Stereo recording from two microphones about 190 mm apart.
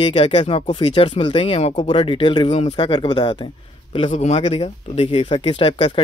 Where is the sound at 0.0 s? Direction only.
25° left (ahead or behind).